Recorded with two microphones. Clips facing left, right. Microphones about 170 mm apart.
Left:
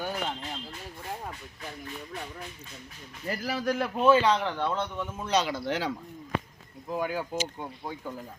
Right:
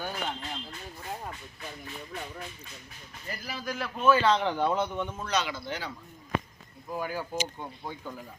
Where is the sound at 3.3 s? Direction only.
75° left (ahead or behind).